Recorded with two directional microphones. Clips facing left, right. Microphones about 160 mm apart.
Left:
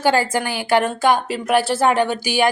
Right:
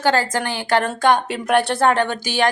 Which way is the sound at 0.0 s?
10° left (ahead or behind).